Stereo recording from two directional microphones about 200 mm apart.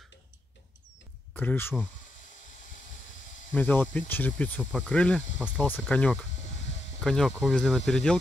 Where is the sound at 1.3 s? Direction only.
5° left (ahead or behind).